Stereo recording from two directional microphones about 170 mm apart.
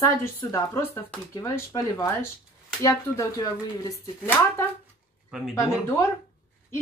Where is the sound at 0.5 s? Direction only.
15° left (ahead or behind).